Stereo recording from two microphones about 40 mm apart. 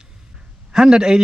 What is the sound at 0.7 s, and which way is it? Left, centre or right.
Speech, centre.